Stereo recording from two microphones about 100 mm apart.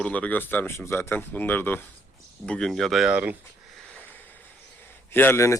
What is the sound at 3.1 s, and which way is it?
Speech, 15° right (ahead or behind).